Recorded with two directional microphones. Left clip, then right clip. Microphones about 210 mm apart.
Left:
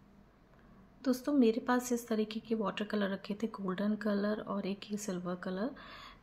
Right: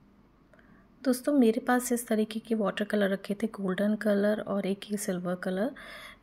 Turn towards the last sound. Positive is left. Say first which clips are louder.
# right 6 dB
turn(degrees=-35)  # may be behind; listen again after turning